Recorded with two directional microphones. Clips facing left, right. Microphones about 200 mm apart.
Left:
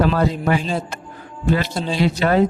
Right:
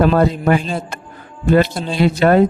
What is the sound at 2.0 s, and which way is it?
Speech, 55° right (ahead or behind).